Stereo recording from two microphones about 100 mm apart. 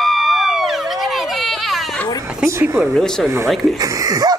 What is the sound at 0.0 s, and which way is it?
Emergency vehicle, centre (ahead or behind).